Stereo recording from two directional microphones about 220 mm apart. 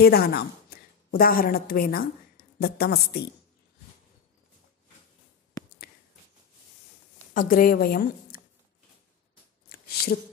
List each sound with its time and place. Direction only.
0.0 s a woman's voice: 45° left (ahead or behind)
5.6 s a sound: 15° left (ahead or behind)
7.3 s a woman's voice: 40° left (ahead or behind)